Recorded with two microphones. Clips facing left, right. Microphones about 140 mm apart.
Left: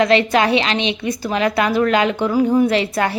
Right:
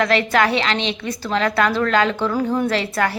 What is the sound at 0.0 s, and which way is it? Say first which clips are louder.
A woman's voice: left 3 dB; 20° left (ahead or behind).